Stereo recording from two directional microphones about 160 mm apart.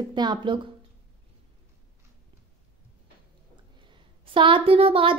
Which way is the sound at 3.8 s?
30° right (ahead or behind).